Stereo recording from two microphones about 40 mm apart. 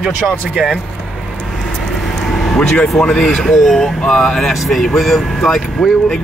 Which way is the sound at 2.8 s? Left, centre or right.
Left.